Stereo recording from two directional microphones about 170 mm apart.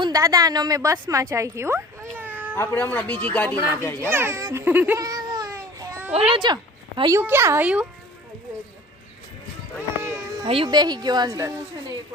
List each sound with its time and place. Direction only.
0.0 s a woman's voice: 20° right (ahead or behind)
2.6 s a man's voice: 10° left (ahead or behind)
4.1 s babbling: 15° right (ahead or behind)
6.3 s speech: 25° right (ahead or behind)
7.2 s speech: 15° right (ahead or behind)
10.0 s a sound: 15° right (ahead or behind)
10.5 s a woman's voice: 30° right (ahead or behind)